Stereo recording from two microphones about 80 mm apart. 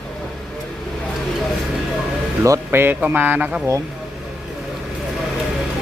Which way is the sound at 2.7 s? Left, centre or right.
Right.